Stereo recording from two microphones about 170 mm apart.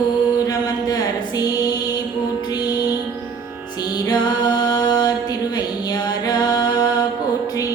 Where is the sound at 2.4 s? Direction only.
25° left (ahead or behind).